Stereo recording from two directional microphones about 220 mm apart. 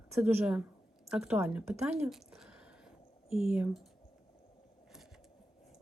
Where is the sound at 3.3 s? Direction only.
25° left (ahead or behind).